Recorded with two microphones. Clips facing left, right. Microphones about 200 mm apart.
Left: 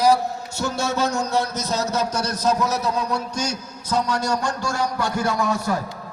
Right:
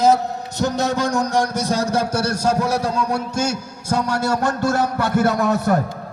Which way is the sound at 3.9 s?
55° right (ahead or behind).